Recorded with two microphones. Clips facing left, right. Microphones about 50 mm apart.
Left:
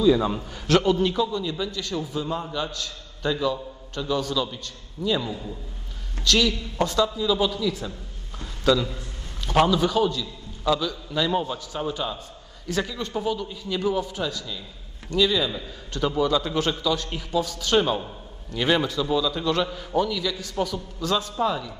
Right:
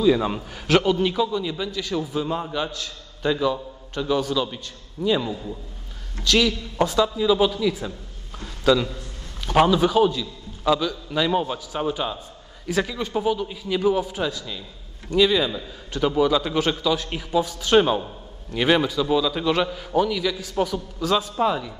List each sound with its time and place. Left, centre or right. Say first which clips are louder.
0.0 s a man's voice: even; centre
5.3 s a man's voice: right 2 dB; centre
8.4 s a sound: right 2 dB; centre
9.5 s a man's voice: right 2 dB; centre
19.7 s a man's voice: right 2 dB; centre